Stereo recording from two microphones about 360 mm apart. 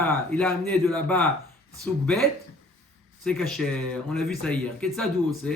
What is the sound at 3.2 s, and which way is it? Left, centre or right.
Speech, centre.